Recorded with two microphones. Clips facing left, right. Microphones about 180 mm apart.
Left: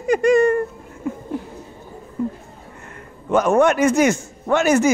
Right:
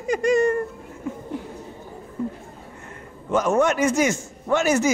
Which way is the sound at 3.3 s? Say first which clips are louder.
Left 4 dB; 60° left (ahead or behind).